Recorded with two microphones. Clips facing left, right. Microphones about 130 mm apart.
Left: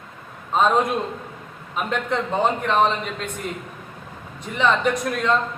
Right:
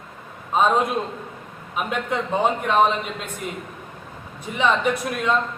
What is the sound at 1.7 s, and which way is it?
A man's voice, 10° right (ahead or behind).